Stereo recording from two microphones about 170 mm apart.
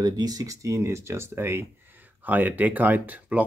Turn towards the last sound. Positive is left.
turn(degrees=-10)  # may be behind; listen again after turning